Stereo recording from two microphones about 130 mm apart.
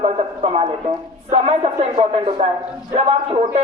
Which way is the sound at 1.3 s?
50° right (ahead or behind).